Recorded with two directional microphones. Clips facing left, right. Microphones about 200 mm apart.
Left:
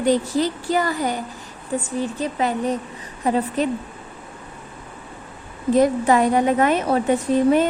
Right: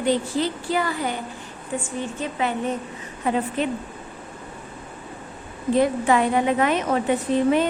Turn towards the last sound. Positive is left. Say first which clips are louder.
# left 3 dB
turn(degrees=40)  # may be behind; listen again after turning